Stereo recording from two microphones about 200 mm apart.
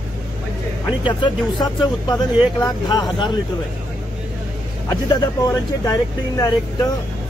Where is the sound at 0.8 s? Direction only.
20° left (ahead or behind).